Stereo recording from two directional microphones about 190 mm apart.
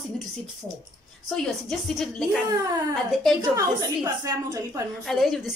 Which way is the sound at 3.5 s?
15° right (ahead or behind).